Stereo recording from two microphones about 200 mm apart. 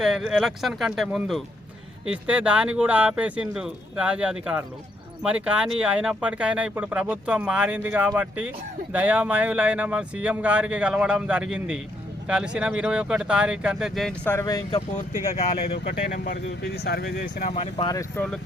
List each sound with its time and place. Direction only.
0.0 s speech: centre (ahead or behind); by 14.8 s 20° left (ahead or behind)
15.3 s speech: 50° left (ahead or behind)
17.5 s speech: 30° left (ahead or behind)
17.9 s speech: 10° left (ahead or behind)